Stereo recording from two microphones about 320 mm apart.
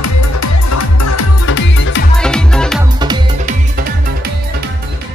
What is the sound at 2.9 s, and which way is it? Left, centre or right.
Music, centre.